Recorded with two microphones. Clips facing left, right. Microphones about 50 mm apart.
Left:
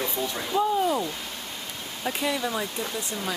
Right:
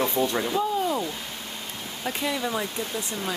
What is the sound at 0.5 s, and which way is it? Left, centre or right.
Speech, centre.